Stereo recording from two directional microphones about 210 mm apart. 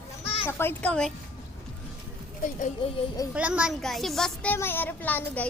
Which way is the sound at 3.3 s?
5° right (ahead or behind).